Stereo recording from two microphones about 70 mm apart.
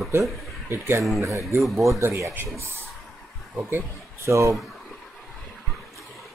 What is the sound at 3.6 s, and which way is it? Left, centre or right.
Speech, right.